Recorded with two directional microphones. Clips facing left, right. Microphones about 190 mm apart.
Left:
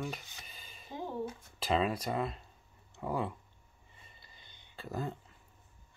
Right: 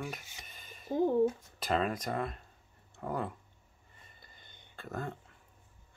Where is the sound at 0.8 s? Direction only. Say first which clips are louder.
Right 11 dB; 45° right (ahead or behind).